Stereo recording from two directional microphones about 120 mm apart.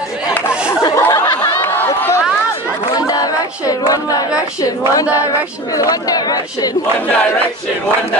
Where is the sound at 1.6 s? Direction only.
20° left (ahead or behind).